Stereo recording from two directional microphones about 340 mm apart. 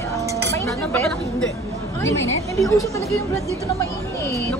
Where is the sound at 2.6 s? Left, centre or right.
Centre.